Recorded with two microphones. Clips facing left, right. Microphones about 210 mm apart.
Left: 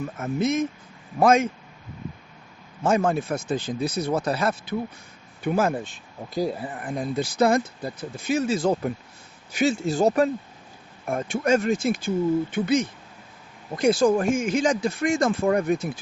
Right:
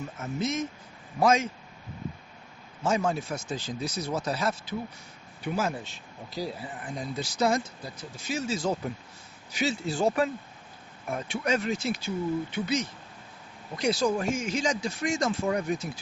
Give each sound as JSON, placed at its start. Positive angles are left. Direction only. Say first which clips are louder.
{"t": 0.0, "sound": "speech", "louder": "left 6 dB", "side_deg": 55}
{"t": 2.8, "sound": "speech", "louder": "left 5 dB", "side_deg": 55}